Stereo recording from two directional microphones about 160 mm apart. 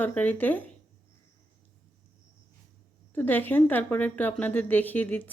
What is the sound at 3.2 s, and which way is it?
A woman's voice, 10° left (ahead or behind).